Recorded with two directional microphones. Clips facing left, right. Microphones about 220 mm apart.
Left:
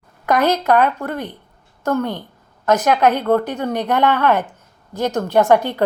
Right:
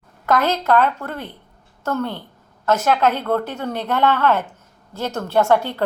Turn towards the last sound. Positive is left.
turn(degrees=15)  # may be behind; listen again after turning